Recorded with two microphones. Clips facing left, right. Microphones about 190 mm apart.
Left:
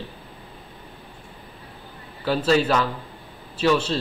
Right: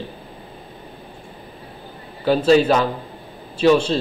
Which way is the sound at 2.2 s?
20° right (ahead or behind).